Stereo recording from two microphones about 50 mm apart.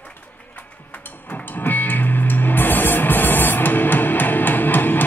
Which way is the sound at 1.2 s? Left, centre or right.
Left.